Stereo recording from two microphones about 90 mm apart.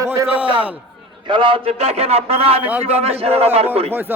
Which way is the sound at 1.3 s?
65° right (ahead or behind).